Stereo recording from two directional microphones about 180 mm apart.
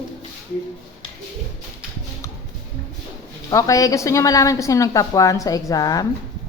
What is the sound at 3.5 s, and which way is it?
A woman's voice, 20° left (ahead or behind).